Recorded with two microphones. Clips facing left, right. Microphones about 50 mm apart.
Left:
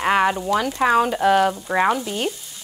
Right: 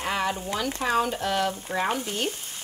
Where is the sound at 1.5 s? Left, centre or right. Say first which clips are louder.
Left 8 dB; left.